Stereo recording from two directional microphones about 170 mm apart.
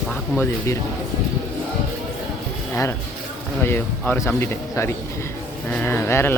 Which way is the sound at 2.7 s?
15° left (ahead or behind).